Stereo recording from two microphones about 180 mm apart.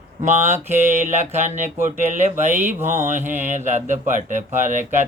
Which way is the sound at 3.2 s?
45° right (ahead or behind).